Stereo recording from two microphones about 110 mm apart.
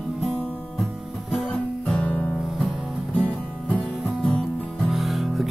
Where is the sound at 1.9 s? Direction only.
10° left (ahead or behind).